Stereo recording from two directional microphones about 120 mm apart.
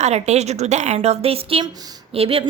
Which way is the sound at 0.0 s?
65° right (ahead or behind).